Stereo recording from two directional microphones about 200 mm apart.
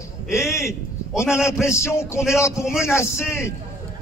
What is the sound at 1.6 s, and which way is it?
A man's voice, 15° left (ahead or behind).